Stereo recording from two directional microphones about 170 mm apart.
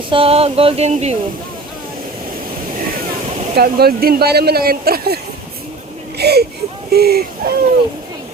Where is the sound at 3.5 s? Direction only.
65° right (ahead or behind).